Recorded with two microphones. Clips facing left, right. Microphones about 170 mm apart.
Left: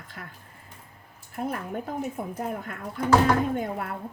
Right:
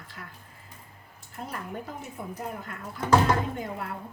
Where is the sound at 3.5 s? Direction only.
55° left (ahead or behind).